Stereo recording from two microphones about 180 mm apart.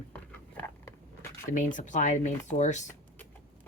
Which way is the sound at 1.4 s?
45° left (ahead or behind).